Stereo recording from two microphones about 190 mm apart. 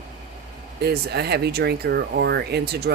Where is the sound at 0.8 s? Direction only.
55° right (ahead or behind).